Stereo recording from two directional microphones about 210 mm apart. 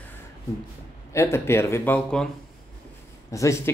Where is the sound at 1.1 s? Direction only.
15° left (ahead or behind).